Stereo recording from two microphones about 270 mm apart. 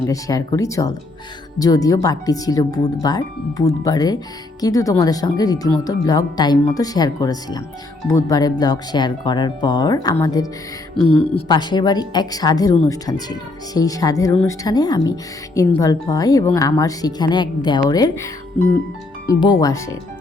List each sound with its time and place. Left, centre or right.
0.1 s speech: centre
19.4 s speech: centre